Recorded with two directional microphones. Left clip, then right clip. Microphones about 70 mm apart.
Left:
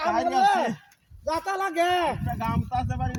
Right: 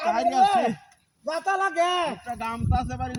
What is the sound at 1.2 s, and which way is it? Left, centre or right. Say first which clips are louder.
Speech: right 2 dB; left.